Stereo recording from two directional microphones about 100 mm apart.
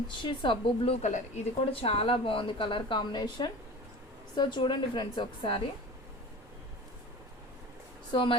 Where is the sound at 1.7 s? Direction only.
75° left (ahead or behind); by 5.6 s 60° left (ahead or behind).